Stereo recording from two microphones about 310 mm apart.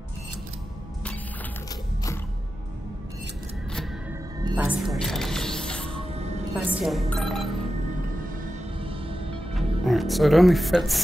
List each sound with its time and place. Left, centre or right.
4.4 s music: centre
6.5 s speech: centre
8.8 s music: centre
9.6 s speech: centre